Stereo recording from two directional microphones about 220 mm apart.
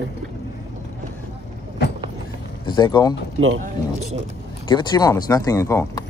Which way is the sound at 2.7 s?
20° left (ahead or behind).